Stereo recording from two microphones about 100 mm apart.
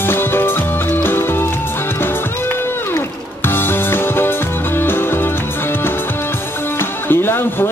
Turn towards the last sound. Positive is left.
turn(degrees=20)  # may be behind; listen again after turning